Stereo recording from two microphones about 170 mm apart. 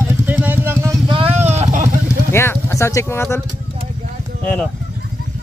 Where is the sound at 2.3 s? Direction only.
15° left (ahead or behind).